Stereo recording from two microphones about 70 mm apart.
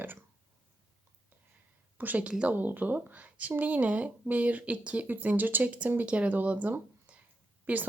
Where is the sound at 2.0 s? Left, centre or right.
Right.